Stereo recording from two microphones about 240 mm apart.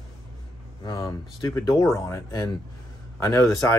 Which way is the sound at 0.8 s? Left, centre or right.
Centre.